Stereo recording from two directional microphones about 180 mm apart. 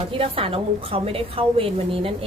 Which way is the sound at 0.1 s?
30° right (ahead or behind).